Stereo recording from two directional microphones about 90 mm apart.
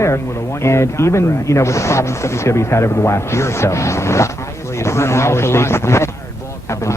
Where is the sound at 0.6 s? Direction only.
30° left (ahead or behind).